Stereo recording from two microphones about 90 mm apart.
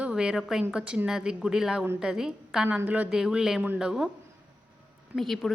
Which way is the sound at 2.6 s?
15° right (ahead or behind).